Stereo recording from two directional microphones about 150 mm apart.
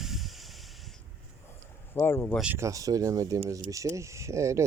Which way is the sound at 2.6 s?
20° right (ahead or behind).